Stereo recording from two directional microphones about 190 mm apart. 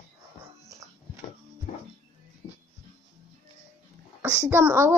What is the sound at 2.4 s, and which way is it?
Music, 25° left (ahead or behind).